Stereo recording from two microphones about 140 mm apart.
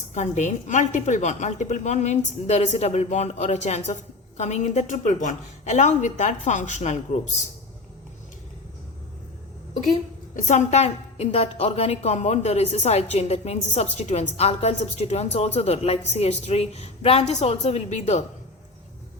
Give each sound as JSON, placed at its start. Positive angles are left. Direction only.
{"t": 0.1, "sound": "a woman's voice", "side_deg": 55}
{"t": 10.3, "sound": "speech", "side_deg": 60}